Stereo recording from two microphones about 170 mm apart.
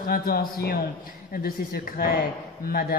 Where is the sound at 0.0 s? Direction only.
60° left (ahead or behind).